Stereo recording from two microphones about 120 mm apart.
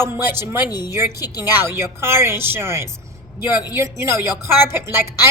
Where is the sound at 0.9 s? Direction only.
20° right (ahead or behind).